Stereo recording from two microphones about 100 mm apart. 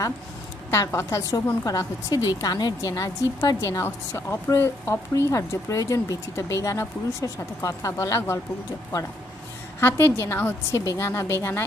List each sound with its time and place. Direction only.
0.7 s speech: 25° left (ahead or behind)
9.8 s a woman's voice: 25° left (ahead or behind)